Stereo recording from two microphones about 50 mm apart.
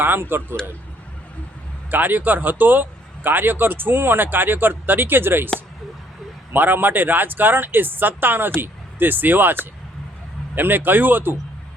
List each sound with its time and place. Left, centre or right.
0.0 s speech: right
1.9 s speech: right
6.5 s speech: right